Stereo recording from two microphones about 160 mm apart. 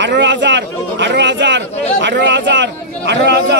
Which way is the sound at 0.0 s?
90° right.